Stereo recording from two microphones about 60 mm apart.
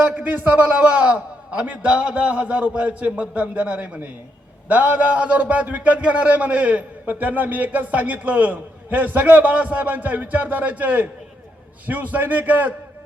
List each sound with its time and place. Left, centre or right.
0.2 s a man's voice: right
0.7 s a man's voice: centre